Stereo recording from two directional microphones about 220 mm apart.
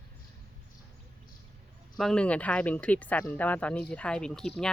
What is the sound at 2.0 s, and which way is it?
Speech, 5° left (ahead or behind).